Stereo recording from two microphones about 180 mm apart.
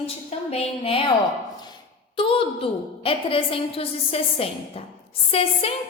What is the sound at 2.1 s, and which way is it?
A woman's voice, 30° left (ahead or behind).